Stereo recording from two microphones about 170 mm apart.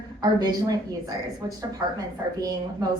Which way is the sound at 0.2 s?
25° right (ahead or behind).